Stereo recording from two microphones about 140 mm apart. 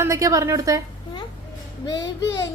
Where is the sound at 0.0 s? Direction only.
20° right (ahead or behind).